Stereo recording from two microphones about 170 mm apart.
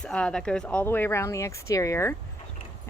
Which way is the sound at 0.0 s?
5° left (ahead or behind).